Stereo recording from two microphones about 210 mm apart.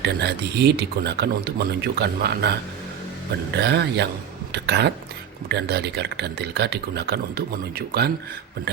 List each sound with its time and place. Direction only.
0.0 s speech: 50° right (ahead or behind)